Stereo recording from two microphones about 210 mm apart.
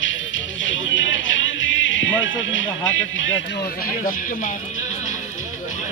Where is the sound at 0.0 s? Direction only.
65° left (ahead or behind).